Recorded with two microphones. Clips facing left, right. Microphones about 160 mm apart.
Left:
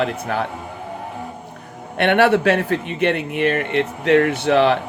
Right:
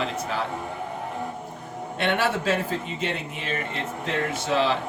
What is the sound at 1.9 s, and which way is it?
A man's voice, 65° left (ahead or behind).